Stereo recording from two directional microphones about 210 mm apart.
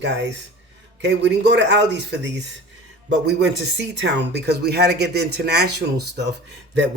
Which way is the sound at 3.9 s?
55° right (ahead or behind).